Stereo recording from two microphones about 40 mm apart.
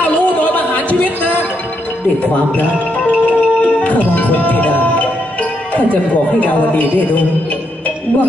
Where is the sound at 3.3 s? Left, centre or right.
Left.